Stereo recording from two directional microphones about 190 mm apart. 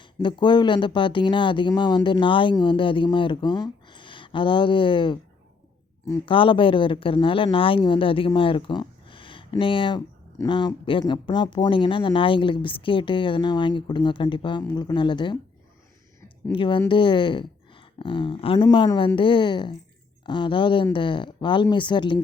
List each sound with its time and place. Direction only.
0.0 s speech: 25° left (ahead or behind)
6.2 s speech: 25° left (ahead or behind)
16.5 s speech: 25° left (ahead or behind)